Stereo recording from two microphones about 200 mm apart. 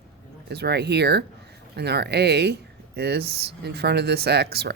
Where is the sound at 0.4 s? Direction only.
55° right (ahead or behind).